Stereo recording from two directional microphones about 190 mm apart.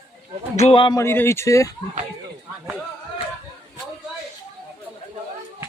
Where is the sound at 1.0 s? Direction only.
15° left (ahead or behind).